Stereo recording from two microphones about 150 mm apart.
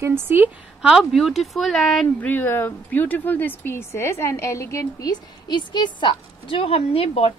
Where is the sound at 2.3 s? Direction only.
15° left (ahead or behind).